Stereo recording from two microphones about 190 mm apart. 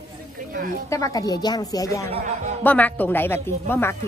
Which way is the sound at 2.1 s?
40° right (ahead or behind).